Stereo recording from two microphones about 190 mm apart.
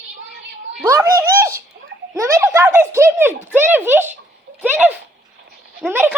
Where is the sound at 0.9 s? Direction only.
15° right (ahead or behind).